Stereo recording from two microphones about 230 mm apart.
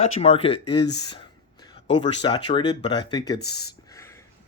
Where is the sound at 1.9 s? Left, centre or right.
Centre.